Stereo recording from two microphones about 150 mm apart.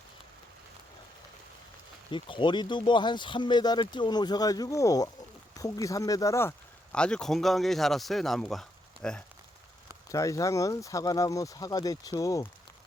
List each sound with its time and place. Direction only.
2.0 s speech: 35° left (ahead or behind)
6.9 s speech: 5° left (ahead or behind)
10.1 s speech: 20° left (ahead or behind)